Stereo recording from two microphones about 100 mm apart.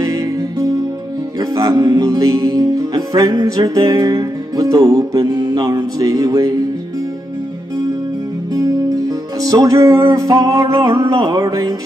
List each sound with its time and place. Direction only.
0.0 s music: 40° right (ahead or behind)
9.4 s music: 35° right (ahead or behind)